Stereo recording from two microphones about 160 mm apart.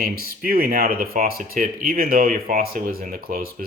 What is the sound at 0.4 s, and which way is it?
Speech, 65° right (ahead or behind).